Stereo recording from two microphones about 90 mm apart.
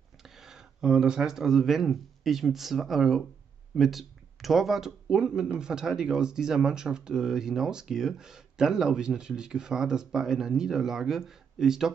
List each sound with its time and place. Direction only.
0.2 s speech: 5° right (ahead or behind)